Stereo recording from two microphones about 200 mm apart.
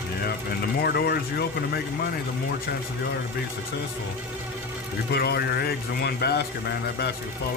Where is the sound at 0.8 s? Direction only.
50° left (ahead or behind).